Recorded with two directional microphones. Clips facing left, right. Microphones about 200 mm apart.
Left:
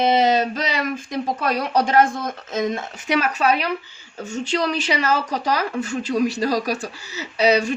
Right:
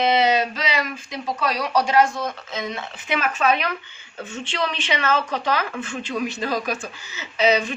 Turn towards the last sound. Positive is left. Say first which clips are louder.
# left 2 dB
turn(degrees=40)  # may be behind; listen again after turning